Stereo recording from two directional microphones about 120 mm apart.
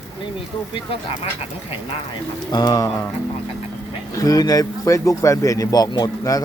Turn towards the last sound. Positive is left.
turn(degrees=30)  # may be behind; listen again after turning